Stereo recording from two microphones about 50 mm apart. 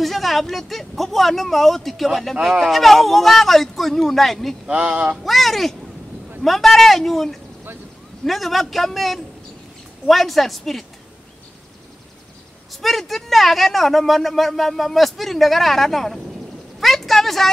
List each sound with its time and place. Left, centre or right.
0.0 s speech: centre
4.6 s speech: right
5.2 s speech: centre
12.8 s speech: centre
16.8 s a sound: centre